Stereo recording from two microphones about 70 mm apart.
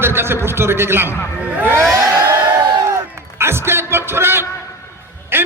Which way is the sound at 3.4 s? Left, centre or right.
Right.